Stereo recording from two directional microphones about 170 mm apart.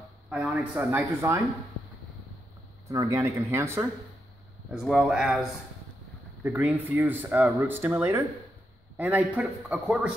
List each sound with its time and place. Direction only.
0.3 s speech: 10° right (ahead or behind)
2.9 s speech: 20° right (ahead or behind)
4.6 s speech: centre (ahead or behind)
6.4 s speech: 10° right (ahead or behind)